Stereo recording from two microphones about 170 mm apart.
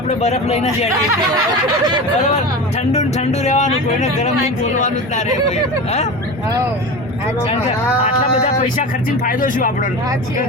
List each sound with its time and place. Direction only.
0.1 s speech: 40° left (ahead or behind)
2.9 s speech: 40° left (ahead or behind)
8.8 s speech: 55° left (ahead or behind)